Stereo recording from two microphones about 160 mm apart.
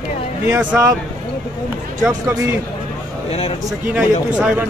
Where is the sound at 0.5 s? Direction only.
10° right (ahead or behind).